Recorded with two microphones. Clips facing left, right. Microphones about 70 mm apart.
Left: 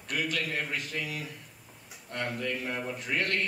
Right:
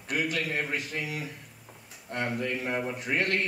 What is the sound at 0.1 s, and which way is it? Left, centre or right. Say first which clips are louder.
A man's voice: right 2 dB; centre.